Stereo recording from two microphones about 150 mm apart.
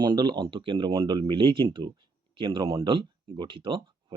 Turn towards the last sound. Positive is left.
turn(degrees=-35)  # may be behind; listen again after turning